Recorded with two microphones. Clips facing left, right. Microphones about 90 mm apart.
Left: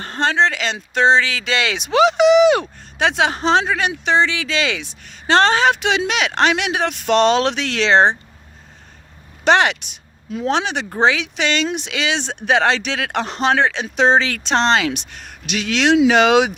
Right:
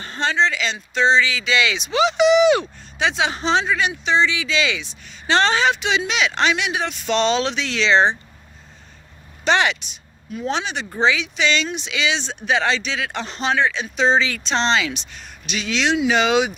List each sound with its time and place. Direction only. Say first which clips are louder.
0.0 s speech: left 3 dB; 55° left (ahead or behind)
9.4 s speech: left 4 dB; 60° left (ahead or behind)
10.3 s speech: left 4 dB; 70° left (ahead or behind)
10.8 s speech: even; 55° left (ahead or behind)
14.6 s speech: left 3 dB; 55° left (ahead or behind)